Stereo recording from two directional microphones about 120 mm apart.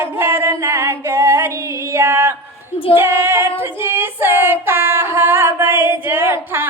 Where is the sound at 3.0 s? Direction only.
20° right (ahead or behind).